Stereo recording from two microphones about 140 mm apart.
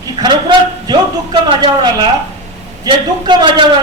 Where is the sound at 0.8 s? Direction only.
30° right (ahead or behind).